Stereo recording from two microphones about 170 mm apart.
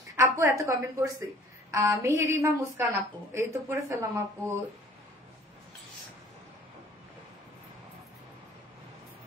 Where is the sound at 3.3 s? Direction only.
15° right (ahead or behind).